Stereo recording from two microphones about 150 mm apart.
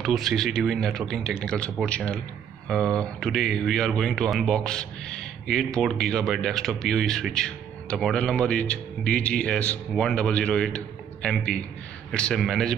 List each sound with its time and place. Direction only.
0.0 s a man's voice: centre (ahead or behind)